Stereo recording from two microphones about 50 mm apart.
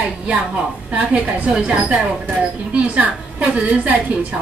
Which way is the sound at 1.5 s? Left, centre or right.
Centre.